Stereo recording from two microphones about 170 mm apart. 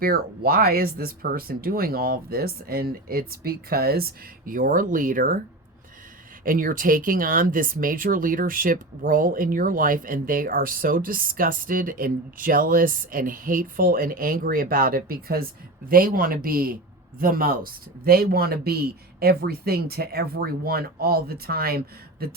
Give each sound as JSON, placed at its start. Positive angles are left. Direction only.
{"t": 0.0, "sound": "speech", "side_deg": -60}
{"t": 6.4, "sound": "speech", "side_deg": -55}